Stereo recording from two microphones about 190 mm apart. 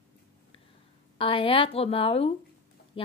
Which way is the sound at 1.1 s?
30° left (ahead or behind).